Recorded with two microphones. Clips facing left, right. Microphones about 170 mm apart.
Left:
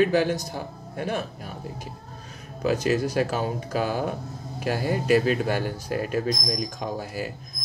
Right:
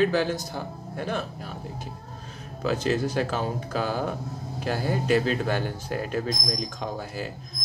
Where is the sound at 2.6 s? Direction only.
10° left (ahead or behind).